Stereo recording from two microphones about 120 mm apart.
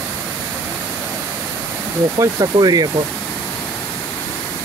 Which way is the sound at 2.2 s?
35° right (ahead or behind).